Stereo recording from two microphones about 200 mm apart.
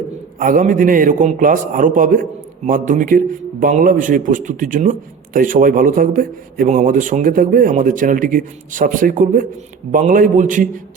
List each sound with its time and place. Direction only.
0.3 s a man's voice: 45° right (ahead or behind)